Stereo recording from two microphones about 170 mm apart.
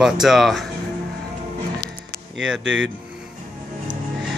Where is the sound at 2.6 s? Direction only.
90° right.